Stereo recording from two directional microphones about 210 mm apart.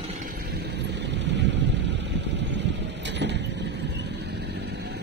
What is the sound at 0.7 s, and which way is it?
Vehicle, 55° right (ahead or behind).